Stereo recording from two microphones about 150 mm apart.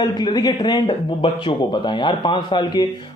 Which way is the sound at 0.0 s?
30° left (ahead or behind).